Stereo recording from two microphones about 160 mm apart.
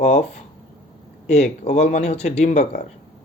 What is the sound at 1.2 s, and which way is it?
Speech, 45° left (ahead or behind).